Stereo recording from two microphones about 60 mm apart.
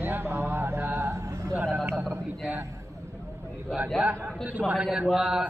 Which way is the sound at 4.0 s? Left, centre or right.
Right.